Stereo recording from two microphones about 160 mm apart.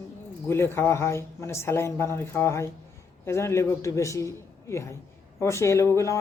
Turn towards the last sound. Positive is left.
turn(degrees=20)  # may be behind; listen again after turning